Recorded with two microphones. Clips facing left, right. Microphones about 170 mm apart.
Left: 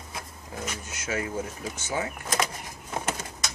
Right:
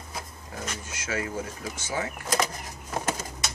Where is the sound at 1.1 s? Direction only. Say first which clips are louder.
Left 1 dB; 25° left (ahead or behind).